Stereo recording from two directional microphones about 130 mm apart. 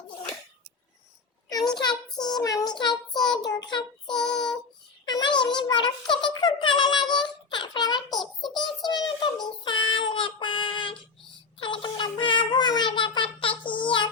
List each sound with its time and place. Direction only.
1.5 s a sound: 30° left (ahead or behind)
2.1 s child singing: 30° left (ahead or behind)
5.0 s a sound: 35° left (ahead or behind)
8.2 s child singing: centre (ahead or behind)
8.5 s child singing: 35° left (ahead or behind)
11.6 s music: 40° left (ahead or behind)
13.4 s child singing: 40° left (ahead or behind)